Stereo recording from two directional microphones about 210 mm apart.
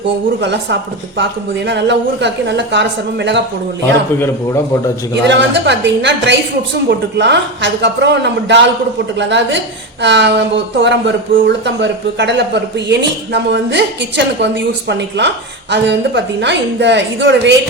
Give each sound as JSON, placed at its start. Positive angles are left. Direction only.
{"t": 0.4, "sound": "speech", "side_deg": -55}
{"t": 5.3, "sound": "speech", "side_deg": -55}